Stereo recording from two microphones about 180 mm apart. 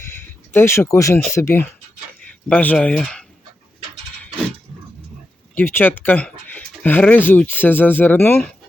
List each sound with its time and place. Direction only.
0.0 s a sound: 15° left (ahead or behind)
1.3 s speech: 15° left (ahead or behind)
5.5 s speech: 10° left (ahead or behind)